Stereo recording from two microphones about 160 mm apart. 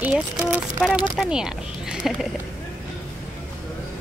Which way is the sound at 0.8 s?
Centre (ahead or behind).